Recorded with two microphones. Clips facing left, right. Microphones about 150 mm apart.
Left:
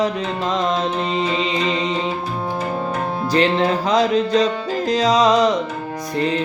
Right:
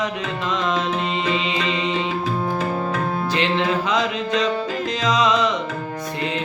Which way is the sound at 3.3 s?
40° left (ahead or behind).